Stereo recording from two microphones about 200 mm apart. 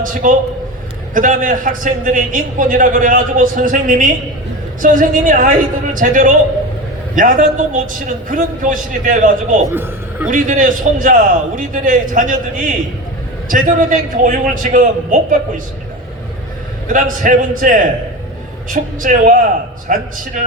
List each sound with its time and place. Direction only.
0.0 s a man's voice: 40° right (ahead or behind)
9.6 s speech: 10° right (ahead or behind)
10.2 s a man's voice: 40° right (ahead or behind)
16.9 s a man's voice: 40° right (ahead or behind)